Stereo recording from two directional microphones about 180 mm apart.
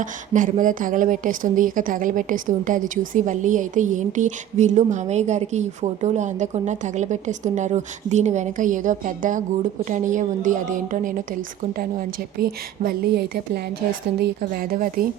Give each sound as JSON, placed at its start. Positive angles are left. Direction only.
{"t": 0.0, "sound": "a woman's voice", "side_deg": -45}